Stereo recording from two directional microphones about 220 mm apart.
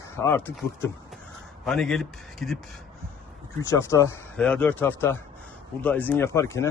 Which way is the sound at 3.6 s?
15° left (ahead or behind).